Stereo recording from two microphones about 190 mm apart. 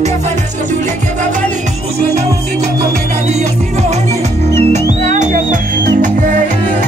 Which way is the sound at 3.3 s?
35° right (ahead or behind).